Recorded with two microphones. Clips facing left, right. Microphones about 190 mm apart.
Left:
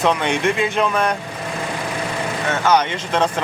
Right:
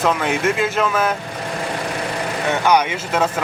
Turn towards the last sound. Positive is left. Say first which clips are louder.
# even
turn(degrees=-5)  # may be behind; listen again after turning